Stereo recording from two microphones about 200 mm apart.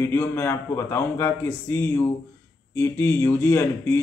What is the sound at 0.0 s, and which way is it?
Speech, 10° left (ahead or behind).